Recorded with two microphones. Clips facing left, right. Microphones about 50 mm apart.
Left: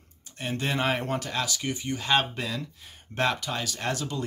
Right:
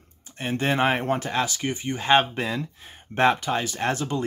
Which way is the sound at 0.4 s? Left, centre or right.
Right.